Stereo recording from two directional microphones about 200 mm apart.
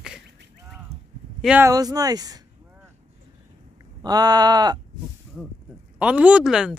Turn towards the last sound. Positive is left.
turn(degrees=-5)  # may be behind; listen again after turning